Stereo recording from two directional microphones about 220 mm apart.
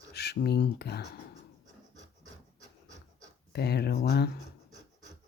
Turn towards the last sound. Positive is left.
turn(degrees=45)  # may be behind; listen again after turning